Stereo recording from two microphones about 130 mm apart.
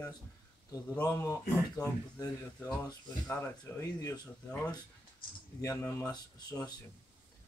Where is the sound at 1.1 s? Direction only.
20° left (ahead or behind).